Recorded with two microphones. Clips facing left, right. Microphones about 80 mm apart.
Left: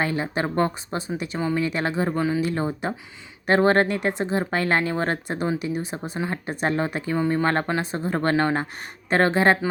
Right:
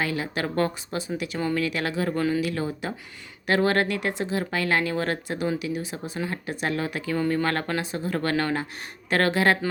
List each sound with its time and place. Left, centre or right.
0.0 s speech: left
0.9 s speech: left
1.4 s speech: centre
1.6 s speech: left
2.1 s speech: centre
2.4 s speech: left
6.1 s speech: left
6.4 s speech: left
7.2 s speech: left